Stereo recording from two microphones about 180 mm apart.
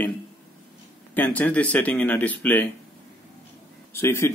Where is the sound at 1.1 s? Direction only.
10° left (ahead or behind).